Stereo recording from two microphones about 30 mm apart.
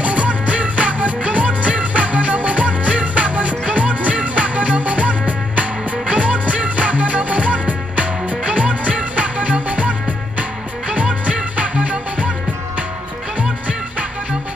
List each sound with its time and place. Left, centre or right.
0.0 s music: right
11.5 s music: right
13.4 s music: right